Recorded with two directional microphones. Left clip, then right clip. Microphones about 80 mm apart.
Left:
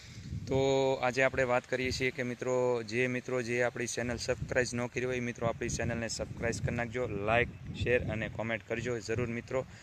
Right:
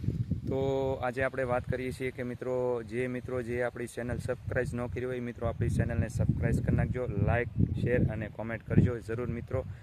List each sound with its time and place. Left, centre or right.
0.5 s speech: centre
1.7 s speech: centre
2.4 s speech: centre
2.9 s speech: centre
6.5 s speech: centre